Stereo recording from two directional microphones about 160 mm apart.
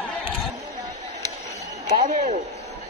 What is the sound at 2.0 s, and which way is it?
Speech, 55° right (ahead or behind).